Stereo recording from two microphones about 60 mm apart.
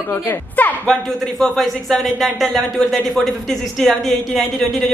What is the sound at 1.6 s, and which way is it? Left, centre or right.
Speech, centre.